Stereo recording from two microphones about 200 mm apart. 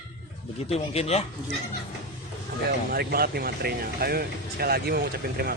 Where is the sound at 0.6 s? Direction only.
30° left (ahead or behind).